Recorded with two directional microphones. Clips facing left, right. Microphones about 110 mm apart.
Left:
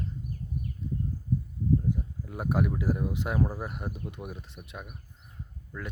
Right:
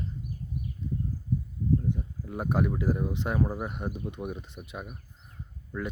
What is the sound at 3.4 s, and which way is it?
Speech, 15° right (ahead or behind).